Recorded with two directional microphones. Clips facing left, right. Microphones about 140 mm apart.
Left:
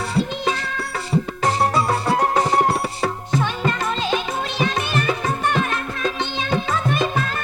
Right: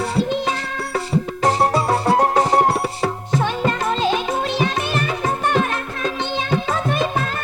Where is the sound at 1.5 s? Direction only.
35° right (ahead or behind).